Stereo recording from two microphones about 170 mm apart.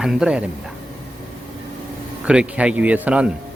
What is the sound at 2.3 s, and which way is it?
Speech, 5° right (ahead or behind).